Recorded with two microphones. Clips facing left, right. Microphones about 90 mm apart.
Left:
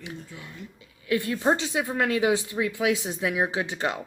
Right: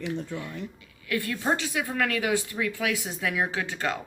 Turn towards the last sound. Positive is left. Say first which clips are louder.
# left 2 dB
turn(degrees=20)  # may be behind; listen again after turning